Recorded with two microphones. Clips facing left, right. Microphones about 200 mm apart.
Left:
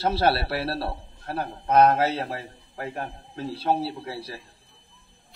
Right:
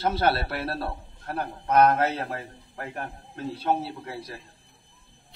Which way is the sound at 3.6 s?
30° left (ahead or behind).